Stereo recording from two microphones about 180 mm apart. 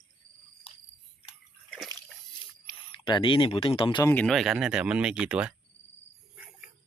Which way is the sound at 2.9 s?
25° left (ahead or behind).